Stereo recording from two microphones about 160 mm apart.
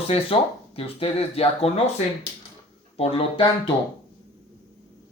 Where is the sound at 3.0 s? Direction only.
35° left (ahead or behind).